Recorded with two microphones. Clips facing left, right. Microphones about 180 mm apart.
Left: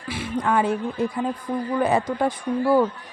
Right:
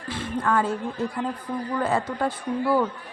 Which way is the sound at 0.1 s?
10° left (ahead or behind).